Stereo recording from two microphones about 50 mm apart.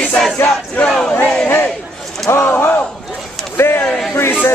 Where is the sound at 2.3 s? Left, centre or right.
Left.